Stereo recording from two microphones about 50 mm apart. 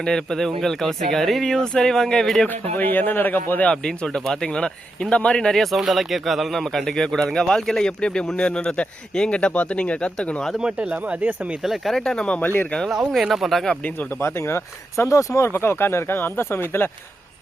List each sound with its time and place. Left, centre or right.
0.0 s speech: centre
2.5 s speech: left
3.7 s speech: centre
5.5 s a man's voice: centre; by 10.4 s left
10.6 s speech: right
11.6 s a man's voice: centre
11.9 s speech: centre
13.1 s a man's voice: centre
14.2 s speech: left